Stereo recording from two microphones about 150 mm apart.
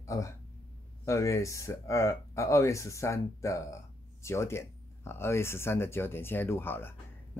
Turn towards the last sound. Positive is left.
turn(degrees=15)  # may be behind; listen again after turning